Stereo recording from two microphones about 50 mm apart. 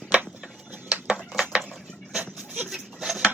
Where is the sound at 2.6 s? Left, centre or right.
Centre.